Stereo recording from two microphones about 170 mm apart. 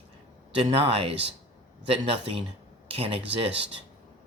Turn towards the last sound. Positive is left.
turn(degrees=-35)  # may be behind; listen again after turning